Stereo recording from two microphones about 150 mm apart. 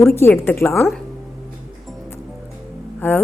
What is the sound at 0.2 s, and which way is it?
Speech, 15° left (ahead or behind).